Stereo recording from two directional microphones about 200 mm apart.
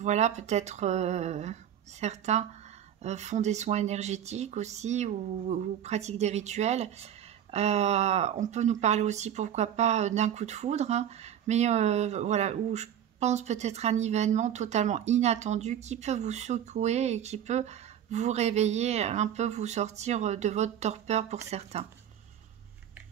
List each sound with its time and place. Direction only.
0.0 s speech: 35° right (ahead or behind)